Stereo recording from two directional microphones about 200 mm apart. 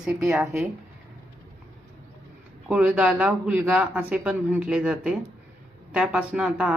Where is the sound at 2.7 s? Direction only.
5° right (ahead or behind).